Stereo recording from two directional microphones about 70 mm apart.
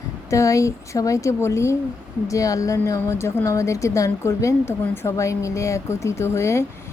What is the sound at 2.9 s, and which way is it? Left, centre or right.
A woman's voice, left.